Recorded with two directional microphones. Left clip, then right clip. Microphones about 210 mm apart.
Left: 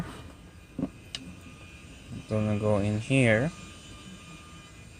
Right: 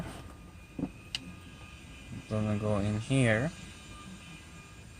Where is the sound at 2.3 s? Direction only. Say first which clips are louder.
Left 5 dB; 20° left (ahead or behind).